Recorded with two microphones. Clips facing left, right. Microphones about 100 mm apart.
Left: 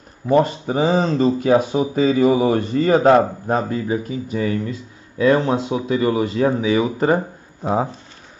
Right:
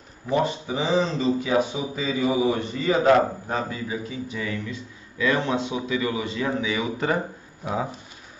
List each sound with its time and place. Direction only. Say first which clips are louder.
0.3 s a man's voice: left 7 dB; 50° left (ahead or behind)